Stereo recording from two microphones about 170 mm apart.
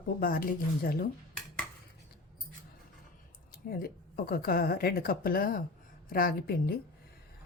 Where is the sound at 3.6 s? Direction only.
60° left (ahead or behind).